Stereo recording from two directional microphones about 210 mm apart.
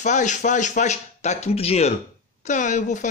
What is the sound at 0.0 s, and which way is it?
Speech, 35° left (ahead or behind).